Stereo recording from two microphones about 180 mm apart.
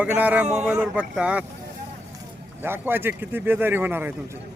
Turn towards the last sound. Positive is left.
turn(degrees=-10)  # may be behind; listen again after turning